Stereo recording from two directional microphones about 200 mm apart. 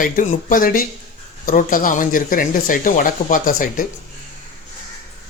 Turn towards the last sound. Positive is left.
turn(degrees=45)  # may be behind; listen again after turning